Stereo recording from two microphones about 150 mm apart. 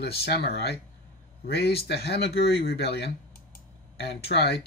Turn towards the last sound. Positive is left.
turn(degrees=90)